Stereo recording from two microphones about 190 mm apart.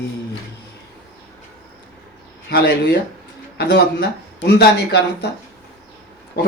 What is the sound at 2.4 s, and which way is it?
Speech, 60° left (ahead or behind).